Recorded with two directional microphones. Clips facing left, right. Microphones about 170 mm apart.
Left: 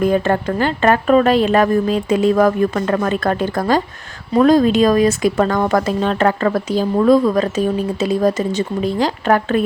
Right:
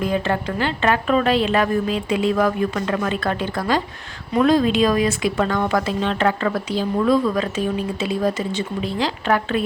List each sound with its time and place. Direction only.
0.0 s speech: 45° left (ahead or behind)